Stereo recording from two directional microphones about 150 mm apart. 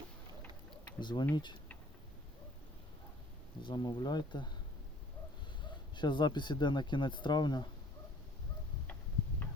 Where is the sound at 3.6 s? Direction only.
30° left (ahead or behind).